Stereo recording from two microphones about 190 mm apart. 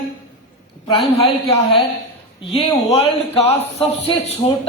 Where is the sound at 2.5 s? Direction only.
30° left (ahead or behind).